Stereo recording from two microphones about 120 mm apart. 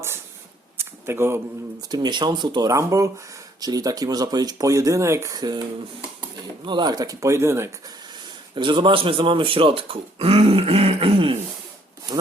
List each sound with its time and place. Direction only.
0.8 s a sound: 20° right (ahead or behind)
1.9 s speech: 40° right (ahead or behind)
6.7 s speech: 40° right (ahead or behind); by 7.7 s 20° right (ahead or behind)
8.5 s speech: 45° right (ahead or behind)